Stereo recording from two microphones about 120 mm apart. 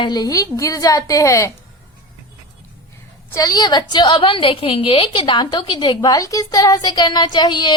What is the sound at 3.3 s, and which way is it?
A woman's voice, 30° left (ahead or behind).